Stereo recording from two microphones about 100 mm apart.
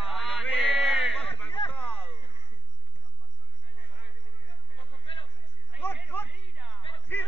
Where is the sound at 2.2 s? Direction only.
20° right (ahead or behind).